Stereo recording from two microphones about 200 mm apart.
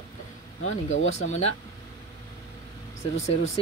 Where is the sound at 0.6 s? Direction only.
75° left (ahead or behind).